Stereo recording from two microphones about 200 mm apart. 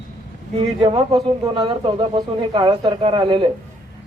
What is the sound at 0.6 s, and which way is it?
Speech, 25° right (ahead or behind).